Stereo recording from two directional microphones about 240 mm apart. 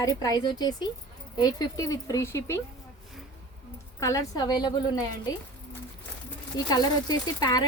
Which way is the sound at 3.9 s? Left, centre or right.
Centre.